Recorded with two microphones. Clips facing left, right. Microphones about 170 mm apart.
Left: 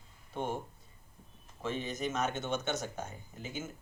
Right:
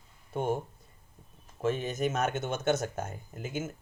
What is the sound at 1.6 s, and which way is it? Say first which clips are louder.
Speech: right 6 dB; 50° right (ahead or behind).